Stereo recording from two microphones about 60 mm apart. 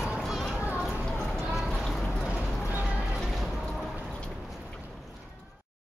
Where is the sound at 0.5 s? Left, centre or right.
Right.